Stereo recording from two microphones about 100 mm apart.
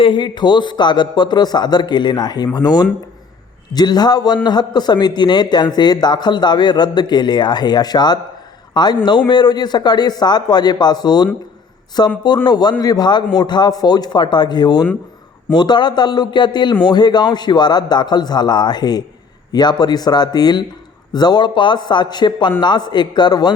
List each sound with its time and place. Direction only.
0.0 s speech: 50° left (ahead or behind)